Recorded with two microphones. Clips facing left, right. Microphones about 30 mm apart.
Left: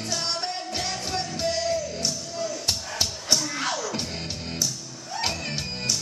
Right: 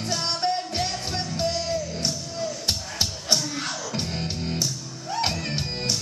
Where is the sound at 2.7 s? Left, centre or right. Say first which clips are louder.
Right 1 dB; right.